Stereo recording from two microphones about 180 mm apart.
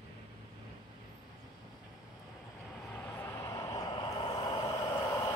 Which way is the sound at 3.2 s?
15° left (ahead or behind).